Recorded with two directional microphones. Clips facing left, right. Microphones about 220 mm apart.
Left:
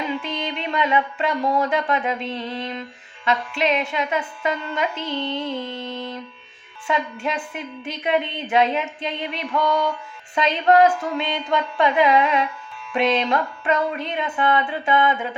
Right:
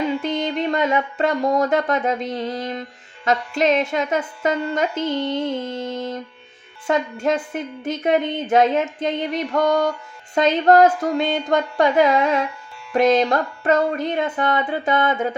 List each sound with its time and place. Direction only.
0.2 s a woman's voice: 45° right (ahead or behind)